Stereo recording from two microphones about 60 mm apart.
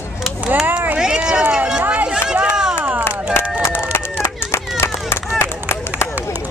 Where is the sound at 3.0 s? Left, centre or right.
Left.